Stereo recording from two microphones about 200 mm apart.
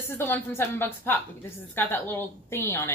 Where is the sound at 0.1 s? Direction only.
10° left (ahead or behind).